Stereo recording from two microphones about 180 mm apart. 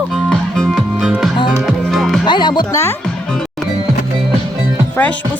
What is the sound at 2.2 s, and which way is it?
Speech, 25° left (ahead or behind).